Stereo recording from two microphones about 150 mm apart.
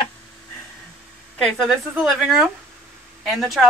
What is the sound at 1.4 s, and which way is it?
A woman's voice, centre (ahead or behind).